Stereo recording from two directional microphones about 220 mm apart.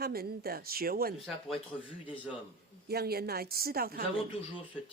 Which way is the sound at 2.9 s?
45° right (ahead or behind).